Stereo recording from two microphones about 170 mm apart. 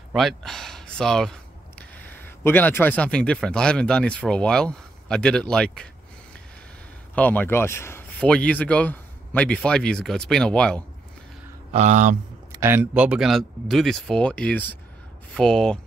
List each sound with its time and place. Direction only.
0.1 s speech: centre (ahead or behind)
7.2 s speech: 10° left (ahead or behind)
11.7 s speech: 45° right (ahead or behind)
12.5 s speech: 15° right (ahead or behind); by 15.8 s 5° left (ahead or behind)